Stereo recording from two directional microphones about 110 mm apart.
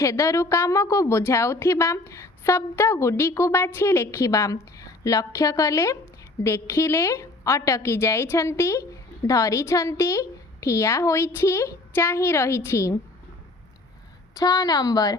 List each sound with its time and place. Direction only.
0.0 s a woman's voice: 25° left (ahead or behind)
14.3 s a woman's voice: 35° left (ahead or behind)